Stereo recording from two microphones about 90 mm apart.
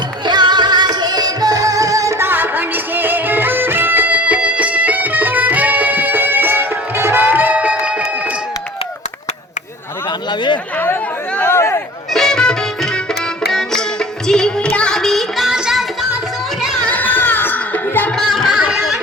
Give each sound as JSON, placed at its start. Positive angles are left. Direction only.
{"t": 0.3, "sound": "music", "side_deg": -55}
{"t": 11.3, "sound": "a sound", "side_deg": 30}
{"t": 12.1, "sound": "music", "side_deg": 5}
{"t": 16.8, "sound": "music", "side_deg": 20}
{"t": 18.2, "sound": "music", "side_deg": 0}